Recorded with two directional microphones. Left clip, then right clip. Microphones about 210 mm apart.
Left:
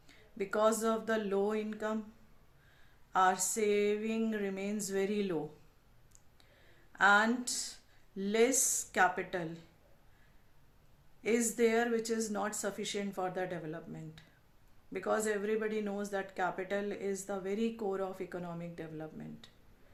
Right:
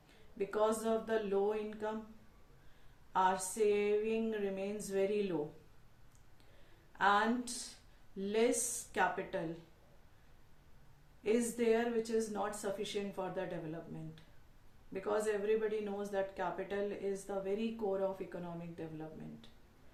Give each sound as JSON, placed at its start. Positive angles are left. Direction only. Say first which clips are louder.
{"t": 0.3, "sound": "speech", "louder": "left 3 dB", "side_deg": 50}
{"t": 3.1, "sound": "speech", "louder": "left 3 dB", "side_deg": 50}
{"t": 6.9, "sound": "speech", "louder": "left 4 dB", "side_deg": 50}
{"t": 11.2, "sound": "speech", "louder": "left 4 dB", "side_deg": 50}
{"t": 14.9, "sound": "speech", "louder": "left 2 dB", "side_deg": 50}